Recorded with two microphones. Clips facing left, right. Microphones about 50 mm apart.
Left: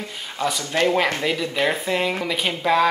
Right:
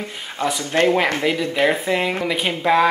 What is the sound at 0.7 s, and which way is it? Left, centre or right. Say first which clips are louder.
Speech: right 3 dB; centre.